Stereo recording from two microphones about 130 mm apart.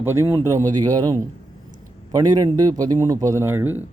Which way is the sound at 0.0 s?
20° right (ahead or behind).